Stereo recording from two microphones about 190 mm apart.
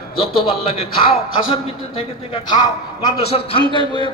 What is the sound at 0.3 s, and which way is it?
A man's voice, 30° left (ahead or behind).